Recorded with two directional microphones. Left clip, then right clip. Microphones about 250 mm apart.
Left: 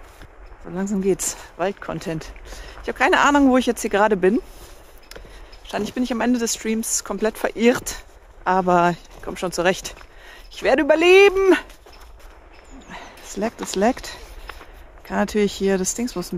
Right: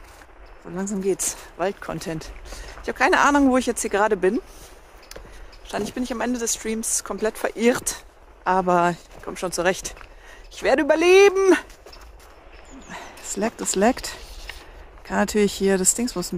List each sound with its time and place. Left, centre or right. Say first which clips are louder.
0.7 s speech: left 3 dB; centre
5.7 s speech: left 3 dB; centre
12.8 s speech: right 1 dB; centre